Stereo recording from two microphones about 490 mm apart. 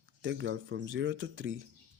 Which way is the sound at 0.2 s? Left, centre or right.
Right.